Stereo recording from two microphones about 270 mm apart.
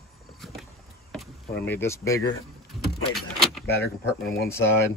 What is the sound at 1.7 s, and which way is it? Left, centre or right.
Speech, centre.